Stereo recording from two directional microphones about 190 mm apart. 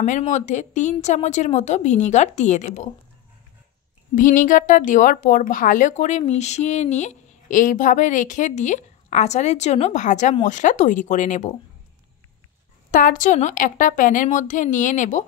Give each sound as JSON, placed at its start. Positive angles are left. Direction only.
{"t": 0.0, "sound": "a woman's voice", "side_deg": 40}
{"t": 4.1, "sound": "a woman's voice", "side_deg": 45}
{"t": 12.9, "sound": "a woman's voice", "side_deg": 45}